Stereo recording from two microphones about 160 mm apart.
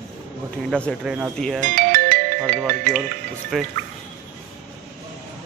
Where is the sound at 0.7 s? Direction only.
5° left (ahead or behind).